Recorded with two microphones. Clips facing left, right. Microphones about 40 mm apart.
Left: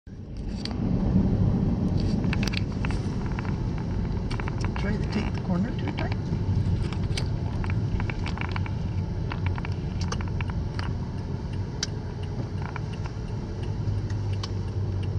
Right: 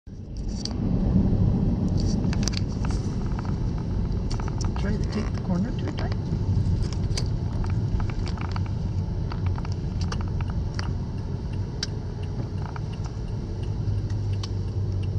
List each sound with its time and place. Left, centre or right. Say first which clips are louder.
0.8 s vehicle: right 1 dB; centre; by 2.9 s left
4.8 s vehicle: even; centre
5.5 s speech: right 1 dB; centre